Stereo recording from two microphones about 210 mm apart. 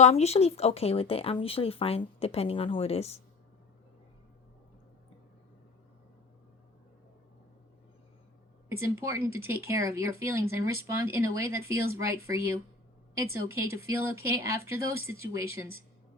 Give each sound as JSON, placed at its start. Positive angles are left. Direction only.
{"t": 0.0, "sound": "speech", "side_deg": 30}
{"t": 8.7, "sound": "speech", "side_deg": -10}